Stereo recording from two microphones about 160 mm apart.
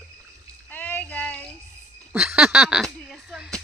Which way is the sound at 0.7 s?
10° left (ahead or behind).